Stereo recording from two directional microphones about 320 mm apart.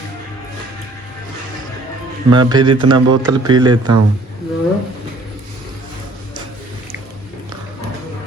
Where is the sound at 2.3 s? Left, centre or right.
Centre.